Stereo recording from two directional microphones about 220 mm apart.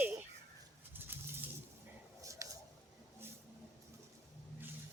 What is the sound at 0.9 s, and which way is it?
Bird, 10° right (ahead or behind).